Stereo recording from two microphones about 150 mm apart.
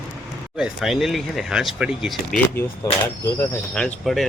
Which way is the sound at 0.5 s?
5° right (ahead or behind).